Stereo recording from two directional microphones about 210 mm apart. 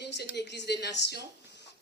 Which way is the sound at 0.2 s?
55° left (ahead or behind).